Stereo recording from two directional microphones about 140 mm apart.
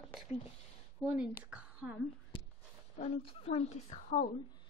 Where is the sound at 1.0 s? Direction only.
10° right (ahead or behind).